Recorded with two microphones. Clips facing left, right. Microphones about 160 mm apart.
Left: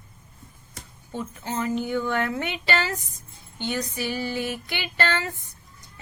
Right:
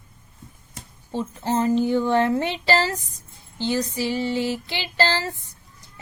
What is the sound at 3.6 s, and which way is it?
Female singing, 30° right (ahead or behind).